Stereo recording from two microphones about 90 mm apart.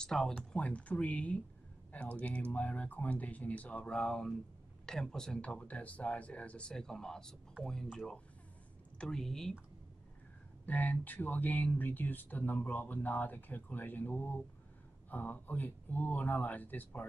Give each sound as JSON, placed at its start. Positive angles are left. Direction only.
{"t": 0.0, "sound": "speech", "side_deg": 5}
{"t": 8.9, "sound": "speech", "side_deg": 5}
{"t": 10.6, "sound": "speech", "side_deg": 20}